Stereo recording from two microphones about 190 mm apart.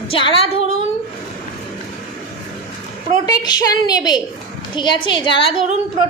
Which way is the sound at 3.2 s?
20° left (ahead or behind).